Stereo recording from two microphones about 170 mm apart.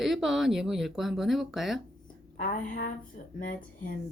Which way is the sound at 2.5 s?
50° left (ahead or behind).